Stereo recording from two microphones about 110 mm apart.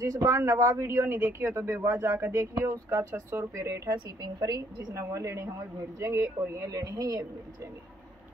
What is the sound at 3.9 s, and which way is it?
A woman's voice, 40° right (ahead or behind).